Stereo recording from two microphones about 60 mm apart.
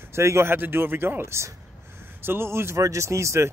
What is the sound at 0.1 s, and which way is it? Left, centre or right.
Speech, right.